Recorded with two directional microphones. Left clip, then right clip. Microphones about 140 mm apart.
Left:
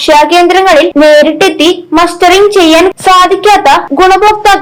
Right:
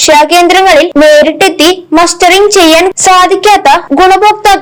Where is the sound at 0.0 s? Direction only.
40° right (ahead or behind).